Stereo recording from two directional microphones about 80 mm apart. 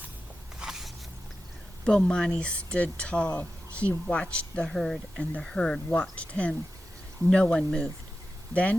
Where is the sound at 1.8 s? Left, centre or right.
Centre.